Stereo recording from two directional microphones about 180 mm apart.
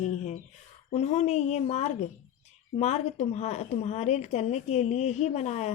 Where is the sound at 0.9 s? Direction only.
40° left (ahead or behind).